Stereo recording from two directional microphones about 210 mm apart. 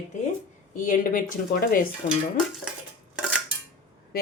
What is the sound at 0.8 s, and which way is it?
Speech, 40° left (ahead or behind).